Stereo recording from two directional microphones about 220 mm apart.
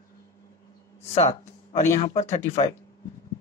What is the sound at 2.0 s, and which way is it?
Speech, 30° left (ahead or behind).